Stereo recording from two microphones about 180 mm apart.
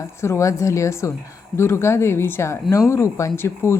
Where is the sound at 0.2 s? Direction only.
15° left (ahead or behind).